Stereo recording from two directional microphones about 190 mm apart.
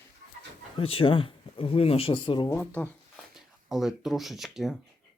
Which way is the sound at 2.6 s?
10° left (ahead or behind).